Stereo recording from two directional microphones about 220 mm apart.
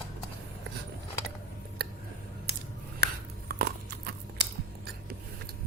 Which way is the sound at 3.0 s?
50° right (ahead or behind).